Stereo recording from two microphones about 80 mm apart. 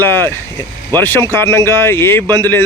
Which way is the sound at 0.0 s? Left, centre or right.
Left.